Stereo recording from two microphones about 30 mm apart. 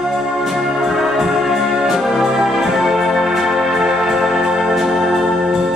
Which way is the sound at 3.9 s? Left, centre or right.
Centre.